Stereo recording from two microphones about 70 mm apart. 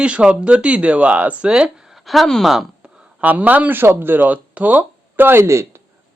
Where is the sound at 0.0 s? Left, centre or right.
Centre.